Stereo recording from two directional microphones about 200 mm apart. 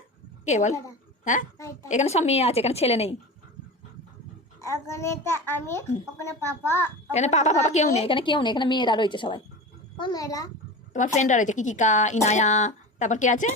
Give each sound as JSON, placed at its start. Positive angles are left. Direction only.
{"t": 0.4, "sound": "a woman's voice", "side_deg": 35}
{"t": 1.5, "sound": "a child's voice", "side_deg": 15}
{"t": 1.9, "sound": "a woman's voice", "side_deg": 35}
{"t": 4.9, "sound": "a child's voice", "side_deg": 15}
{"t": 7.1, "sound": "a woman's voice", "side_deg": 35}
{"t": 10.9, "sound": "a woman's voice", "side_deg": 35}